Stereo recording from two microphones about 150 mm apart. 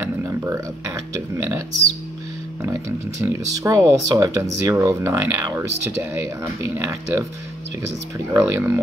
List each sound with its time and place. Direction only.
0.0 s a sound: 15° right (ahead or behind)
1.3 s speech: 20° right (ahead or behind)
3.2 s speech: 20° right (ahead or behind)
8.3 s speech: 15° right (ahead or behind)